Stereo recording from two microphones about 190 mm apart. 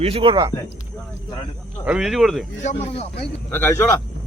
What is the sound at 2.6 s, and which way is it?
Speech, 35° left (ahead or behind).